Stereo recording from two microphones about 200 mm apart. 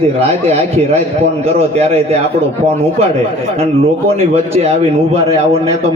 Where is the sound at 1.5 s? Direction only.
30° right (ahead or behind).